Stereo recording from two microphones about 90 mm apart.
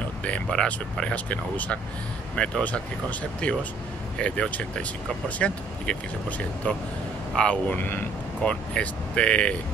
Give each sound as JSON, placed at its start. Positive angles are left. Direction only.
{"t": 0.2, "sound": "speech", "side_deg": 10}